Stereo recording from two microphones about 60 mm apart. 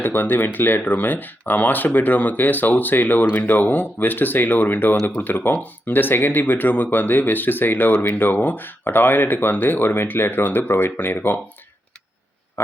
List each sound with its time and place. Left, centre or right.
0.0 s speech: left
12.6 s speech: left